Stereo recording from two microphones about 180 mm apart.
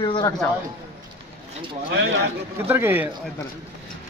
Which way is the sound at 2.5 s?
15° right (ahead or behind).